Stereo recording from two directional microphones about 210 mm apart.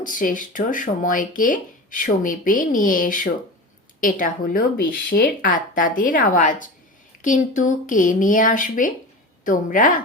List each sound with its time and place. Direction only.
0.0 s speech: 40° left (ahead or behind)